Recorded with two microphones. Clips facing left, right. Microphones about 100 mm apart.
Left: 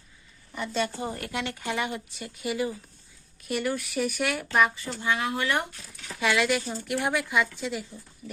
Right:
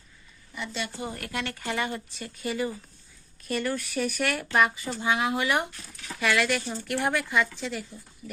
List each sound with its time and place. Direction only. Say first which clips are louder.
0.5 s speech: left 5 dB; 40° left (ahead or behind); by 4.4 s 10° left (ahead or behind)
4.5 s speech: even; centre (ahead or behind)
4.8 s speech: right 2 dB; 20° right (ahead or behind)
6.1 s speech: left 1 dB; 20° left (ahead or behind)